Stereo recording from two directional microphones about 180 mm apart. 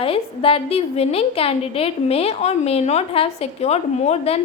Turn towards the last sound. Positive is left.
turn(degrees=35)  # may be behind; listen again after turning